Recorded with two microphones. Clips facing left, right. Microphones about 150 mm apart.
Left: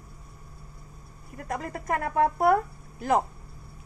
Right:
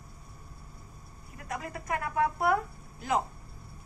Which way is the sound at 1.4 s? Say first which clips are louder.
Left 5 dB; 45° left (ahead or behind).